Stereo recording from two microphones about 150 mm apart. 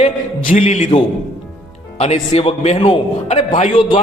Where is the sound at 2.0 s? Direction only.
45° left (ahead or behind).